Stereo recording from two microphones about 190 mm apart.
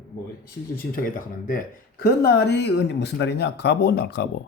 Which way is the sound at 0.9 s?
45° left (ahead or behind).